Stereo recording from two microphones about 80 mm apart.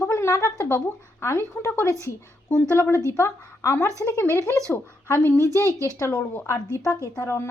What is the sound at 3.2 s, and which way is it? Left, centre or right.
Speech, left.